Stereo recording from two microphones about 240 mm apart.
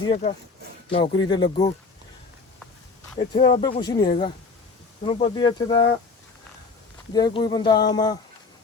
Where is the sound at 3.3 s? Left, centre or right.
Left.